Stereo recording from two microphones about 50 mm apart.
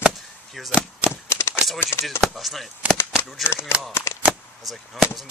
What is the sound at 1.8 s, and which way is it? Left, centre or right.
Speech, left.